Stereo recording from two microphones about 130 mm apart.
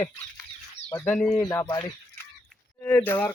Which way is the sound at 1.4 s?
20° left (ahead or behind).